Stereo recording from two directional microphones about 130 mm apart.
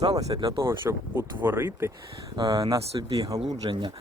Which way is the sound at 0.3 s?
30° right (ahead or behind).